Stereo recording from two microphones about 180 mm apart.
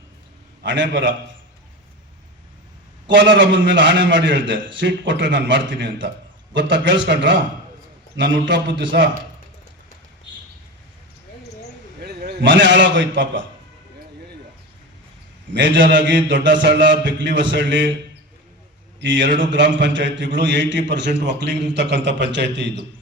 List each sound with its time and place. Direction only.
0.6 s a man's voice: 80° right
3.1 s a man's voice: 80° right
12.0 s a man's voice: 65° right (ahead or behind); by 13.4 s 85° right
15.5 s a man's voice: 85° right
18.9 s a man's voice: 80° right